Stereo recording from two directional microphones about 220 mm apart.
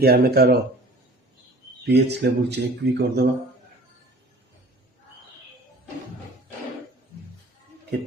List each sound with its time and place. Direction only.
0.0 s speech: 45° right (ahead or behind)
1.8 s speech: 50° right (ahead or behind)